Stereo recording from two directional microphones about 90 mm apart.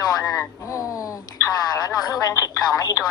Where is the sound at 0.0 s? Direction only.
45° left (ahead or behind).